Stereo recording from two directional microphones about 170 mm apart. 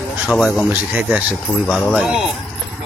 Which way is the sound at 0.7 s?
10° right (ahead or behind).